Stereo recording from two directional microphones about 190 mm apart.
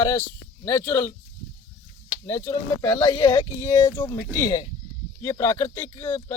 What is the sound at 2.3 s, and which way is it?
Speech, 15° left (ahead or behind).